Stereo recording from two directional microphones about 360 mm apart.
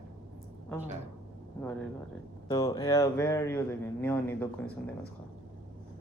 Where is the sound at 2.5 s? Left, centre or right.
Centre.